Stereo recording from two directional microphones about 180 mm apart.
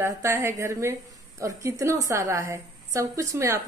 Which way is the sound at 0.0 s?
15° right (ahead or behind).